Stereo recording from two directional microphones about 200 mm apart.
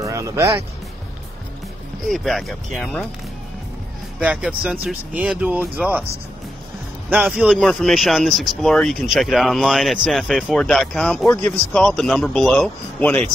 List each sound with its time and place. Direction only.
0.0 s speech: 15° right (ahead or behind)
2.0 s speech: centre (ahead or behind)
4.2 s speech: 5° right (ahead or behind)
7.1 s speech: 5° right (ahead or behind)